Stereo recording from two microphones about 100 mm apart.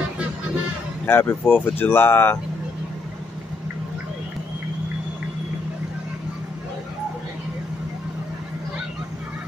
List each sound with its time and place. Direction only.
1.0 s speech: 20° left (ahead or behind)